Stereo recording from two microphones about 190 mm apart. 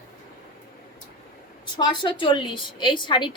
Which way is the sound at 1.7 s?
25° left (ahead or behind).